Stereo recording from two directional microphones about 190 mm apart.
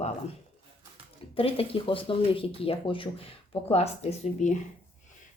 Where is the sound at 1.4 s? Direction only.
30° left (ahead or behind).